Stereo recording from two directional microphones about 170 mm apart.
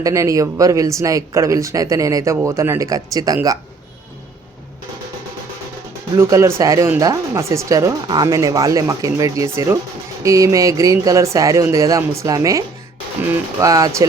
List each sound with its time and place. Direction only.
0.0 s speech: 20° right (ahead or behind)
6.1 s speech: 15° right (ahead or behind)